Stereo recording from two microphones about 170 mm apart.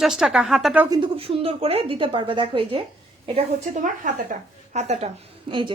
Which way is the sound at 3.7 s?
50° right (ahead or behind).